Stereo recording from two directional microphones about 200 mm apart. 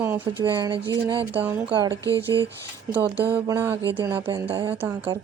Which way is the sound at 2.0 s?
15° left (ahead or behind).